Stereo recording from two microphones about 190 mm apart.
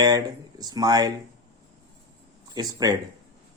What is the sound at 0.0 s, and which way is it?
Speech, 20° right (ahead or behind).